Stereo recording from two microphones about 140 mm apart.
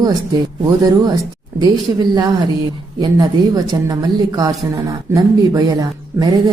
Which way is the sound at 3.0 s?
25° right (ahead or behind).